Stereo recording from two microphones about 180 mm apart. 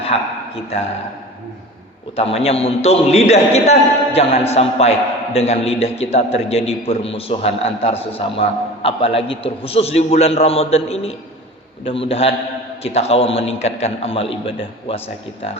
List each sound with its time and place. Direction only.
0.0 s a man's voice: 35° left (ahead or behind)
2.1 s a man's voice: 35° left (ahead or behind)